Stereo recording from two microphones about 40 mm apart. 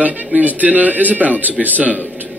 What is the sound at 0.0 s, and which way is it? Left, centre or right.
Speech, right.